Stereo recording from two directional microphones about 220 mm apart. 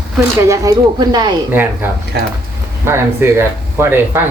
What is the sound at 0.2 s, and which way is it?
Speech, 15° right (ahead or behind).